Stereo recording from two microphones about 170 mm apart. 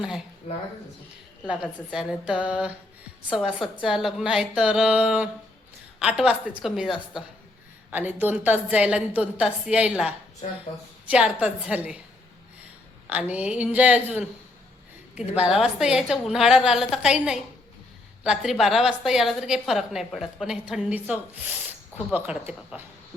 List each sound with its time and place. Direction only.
0.4 s speech: 35° left (ahead or behind)
1.6 s a woman's voice: 5° right (ahead or behind)
13.1 s a woman's voice: 10° right (ahead or behind)
15.4 s a woman's voice: 5° right (ahead or behind)